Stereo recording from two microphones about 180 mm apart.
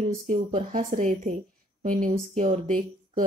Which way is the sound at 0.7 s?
45° right (ahead or behind).